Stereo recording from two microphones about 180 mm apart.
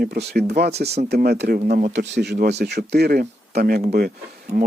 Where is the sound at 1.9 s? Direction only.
70° right (ahead or behind).